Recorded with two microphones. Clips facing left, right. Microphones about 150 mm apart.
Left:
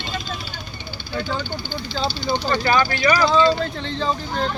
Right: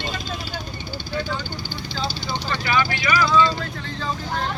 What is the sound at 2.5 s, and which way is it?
Speech, 40° left (ahead or behind).